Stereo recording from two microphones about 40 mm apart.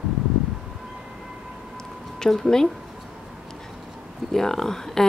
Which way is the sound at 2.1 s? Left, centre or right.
Centre.